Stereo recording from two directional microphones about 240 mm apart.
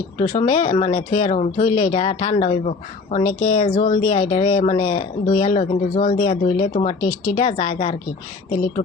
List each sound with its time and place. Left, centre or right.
0.2 s speech: left